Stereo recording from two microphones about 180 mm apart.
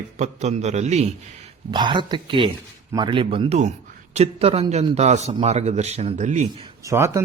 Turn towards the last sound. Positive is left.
turn(degrees=-15)  # may be behind; listen again after turning